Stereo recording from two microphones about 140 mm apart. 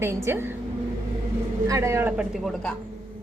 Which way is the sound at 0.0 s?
15° right (ahead or behind).